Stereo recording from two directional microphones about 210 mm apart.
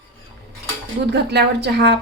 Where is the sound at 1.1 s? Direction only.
55° right (ahead or behind).